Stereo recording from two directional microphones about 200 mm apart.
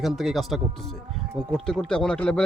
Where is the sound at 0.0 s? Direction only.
Centre (ahead or behind).